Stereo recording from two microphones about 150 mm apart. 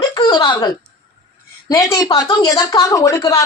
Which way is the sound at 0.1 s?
25° left (ahead or behind).